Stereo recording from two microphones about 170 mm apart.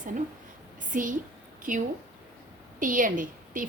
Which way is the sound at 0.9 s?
50° right (ahead or behind).